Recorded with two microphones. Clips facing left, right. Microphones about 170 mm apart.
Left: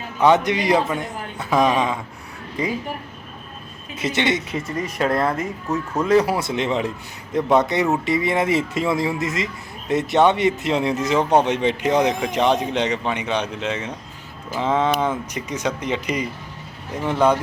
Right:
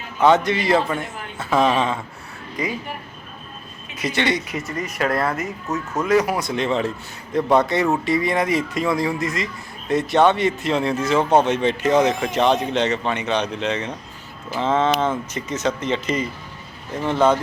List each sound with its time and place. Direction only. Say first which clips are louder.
0.2 s a man's voice: even; 15° left (ahead or behind)
2.6 s speech: left 2 dB; 30° left (ahead or behind)
3.9 s speech: left 1 dB; 25° left (ahead or behind)
4.9 s speech: left 1 dB; 5° right (ahead or behind)
6.1 s a man's voice: left 1 dB; 30° left (ahead or behind); by 17.3 s 10° left (ahead or behind)